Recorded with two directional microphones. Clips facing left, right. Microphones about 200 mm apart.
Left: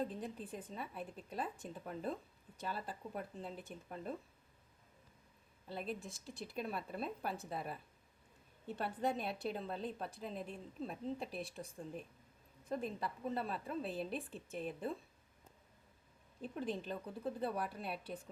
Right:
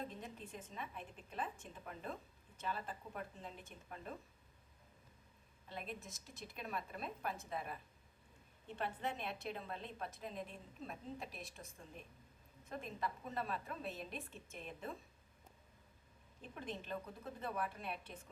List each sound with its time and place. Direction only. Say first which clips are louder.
0.0 s a woman's voice: left 7 dB; 35° left (ahead or behind)
5.6 s a woman's voice: left 5 dB; 35° left (ahead or behind)
16.4 s a woman's voice: left 7 dB; 35° left (ahead or behind)